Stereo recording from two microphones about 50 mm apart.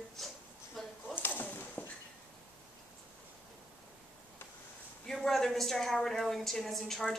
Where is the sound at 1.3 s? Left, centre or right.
Left.